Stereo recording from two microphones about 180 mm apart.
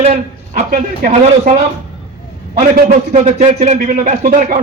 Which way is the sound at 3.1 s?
40° right (ahead or behind).